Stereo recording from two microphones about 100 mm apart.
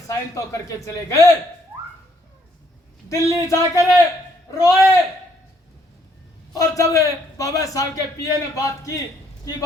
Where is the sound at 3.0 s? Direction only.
35° left (ahead or behind).